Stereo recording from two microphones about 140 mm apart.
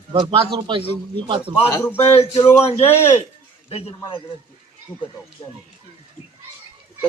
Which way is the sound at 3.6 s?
45° left (ahead or behind).